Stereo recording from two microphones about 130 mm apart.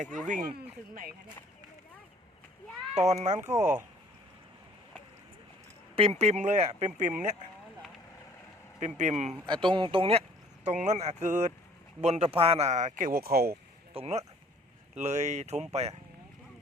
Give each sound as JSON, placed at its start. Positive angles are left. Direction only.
{"t": 0.0, "sound": "speech", "side_deg": -75}
{"t": 2.9, "sound": "speech", "side_deg": -60}
{"t": 3.6, "sound": "speech", "side_deg": -15}
{"t": 6.0, "sound": "speech", "side_deg": -50}
{"t": 9.0, "sound": "speech", "side_deg": -65}
{"t": 9.5, "sound": "speech", "side_deg": -35}
{"t": 13.9, "sound": "speech", "side_deg": -50}
{"t": 14.9, "sound": "speech", "side_deg": -65}